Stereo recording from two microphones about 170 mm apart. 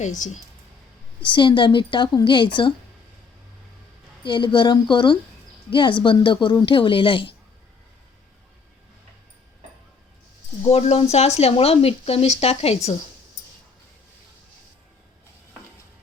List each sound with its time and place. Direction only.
1.2 s a woman's voice: 30° left (ahead or behind)
4.2 s a woman's voice: 30° left (ahead or behind)
10.6 s speech: 40° left (ahead or behind)